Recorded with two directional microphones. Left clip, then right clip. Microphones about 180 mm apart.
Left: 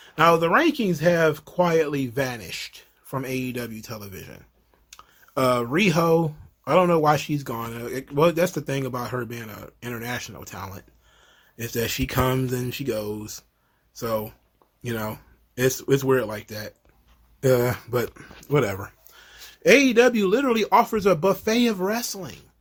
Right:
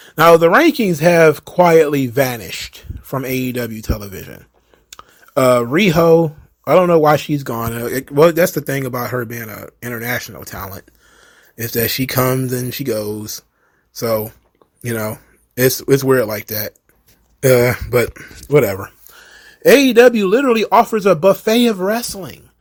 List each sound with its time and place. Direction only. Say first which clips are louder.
0.0 s speech: right 9 dB; 35° right (ahead or behind)
17.4 s speech: right 9 dB; 20° right (ahead or behind)
18.1 s speech: right 8 dB; 10° right (ahead or behind)
18.5 s speech: right 10 dB; 25° right (ahead or behind)